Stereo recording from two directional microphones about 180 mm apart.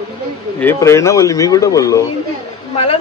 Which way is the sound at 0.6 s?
15° left (ahead or behind).